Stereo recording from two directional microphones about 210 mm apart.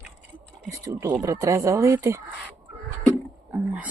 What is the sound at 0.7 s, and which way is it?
Speech, 15° right (ahead or behind).